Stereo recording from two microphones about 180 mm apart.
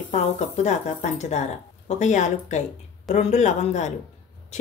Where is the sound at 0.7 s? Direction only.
40° left (ahead or behind).